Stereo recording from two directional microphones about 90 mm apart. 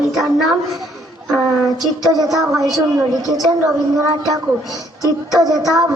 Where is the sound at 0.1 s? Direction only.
5° right (ahead or behind).